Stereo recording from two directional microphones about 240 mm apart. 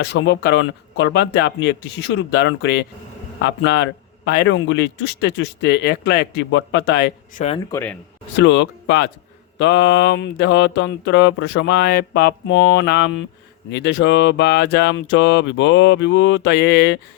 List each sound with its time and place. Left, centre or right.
0.0 s mantra: left
7.3 s speech: left
7.7 s speech: centre
8.4 s mantra: left